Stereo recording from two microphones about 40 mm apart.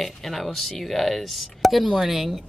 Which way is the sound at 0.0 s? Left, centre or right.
Centre.